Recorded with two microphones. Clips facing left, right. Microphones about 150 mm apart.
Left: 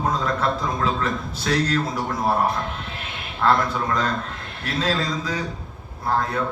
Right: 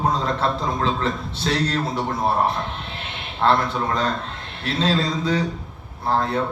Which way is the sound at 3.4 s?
25° right (ahead or behind).